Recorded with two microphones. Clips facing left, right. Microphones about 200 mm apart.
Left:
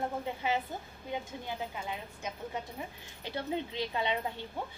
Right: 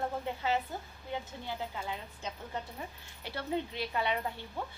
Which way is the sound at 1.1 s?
15° left (ahead or behind).